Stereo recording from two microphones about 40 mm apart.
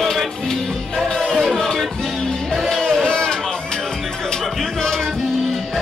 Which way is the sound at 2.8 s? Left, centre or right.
Centre.